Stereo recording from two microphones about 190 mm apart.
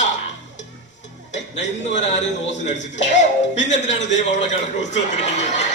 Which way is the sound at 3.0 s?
70° left (ahead or behind).